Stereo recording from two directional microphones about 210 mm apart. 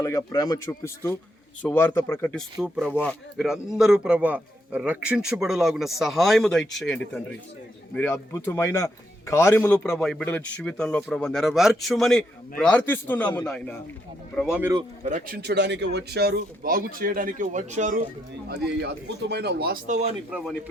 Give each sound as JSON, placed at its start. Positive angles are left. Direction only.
{"t": 0.0, "sound": "a man's voice", "side_deg": 15}
{"t": 2.6, "sound": "a man's voice", "side_deg": 0}
{"t": 15.0, "sound": "a man's voice", "side_deg": -35}
{"t": 15.4, "sound": "speech", "side_deg": -55}
{"t": 18.4, "sound": "speech", "side_deg": -55}
{"t": 20.3, "sound": "speech", "side_deg": 0}